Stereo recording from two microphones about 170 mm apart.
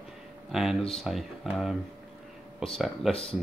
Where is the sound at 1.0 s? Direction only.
Centre (ahead or behind).